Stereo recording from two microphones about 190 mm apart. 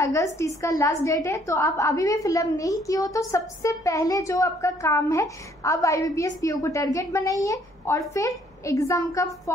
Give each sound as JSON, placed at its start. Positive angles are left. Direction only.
{"t": 0.0, "sound": "a woman's voice", "side_deg": 15}